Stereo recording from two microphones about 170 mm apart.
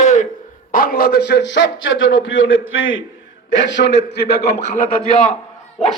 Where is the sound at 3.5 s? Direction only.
90° left.